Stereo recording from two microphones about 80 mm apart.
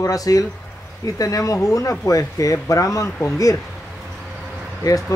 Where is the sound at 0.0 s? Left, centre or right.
Left.